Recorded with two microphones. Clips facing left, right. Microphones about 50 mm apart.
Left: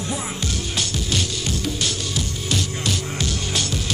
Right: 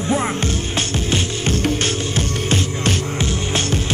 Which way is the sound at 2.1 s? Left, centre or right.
Right.